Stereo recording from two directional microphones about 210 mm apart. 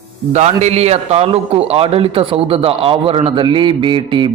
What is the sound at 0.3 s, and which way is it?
A man's voice, 30° right (ahead or behind).